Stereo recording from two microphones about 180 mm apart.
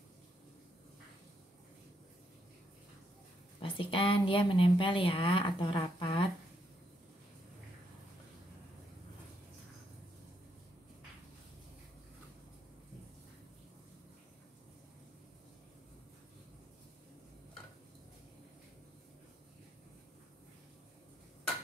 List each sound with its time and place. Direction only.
3.6 s speech: 30° left (ahead or behind)